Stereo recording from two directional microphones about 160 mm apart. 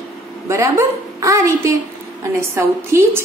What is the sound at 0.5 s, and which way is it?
A woman's voice, 20° right (ahead or behind).